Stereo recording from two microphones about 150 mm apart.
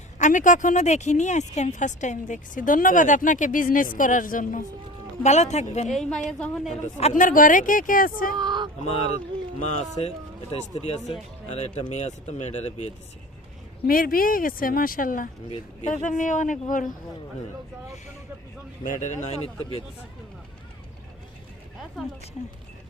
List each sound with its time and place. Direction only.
0.2 s a woman's voice: 60° left (ahead or behind)
5.2 s speech: 50° left (ahead or behind)
5.9 s a woman's voice: 5° left (ahead or behind)
7.1 s a woman's voice: 65° left (ahead or behind)
8.4 s a sound: 30° right (ahead or behind)
9.6 s speech: 50° left (ahead or behind)
13.8 s speech: 70° left (ahead or behind)
15.4 s speech: 45° left (ahead or behind)
15.9 s a woman's voice: 60° left (ahead or behind)
18.9 s speech: 55° left (ahead or behind)